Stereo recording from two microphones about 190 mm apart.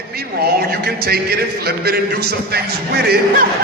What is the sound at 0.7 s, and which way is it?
A man's voice, 55° right (ahead or behind).